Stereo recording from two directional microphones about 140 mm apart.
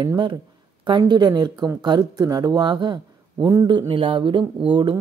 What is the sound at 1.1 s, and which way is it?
Speech, 30° right (ahead or behind).